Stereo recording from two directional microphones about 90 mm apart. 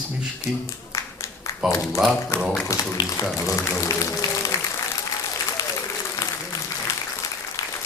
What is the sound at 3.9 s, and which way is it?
Applause, 35° left (ahead or behind).